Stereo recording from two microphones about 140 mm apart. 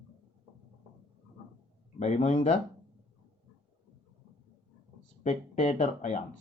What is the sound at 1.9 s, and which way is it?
Speech, 55° left (ahead or behind).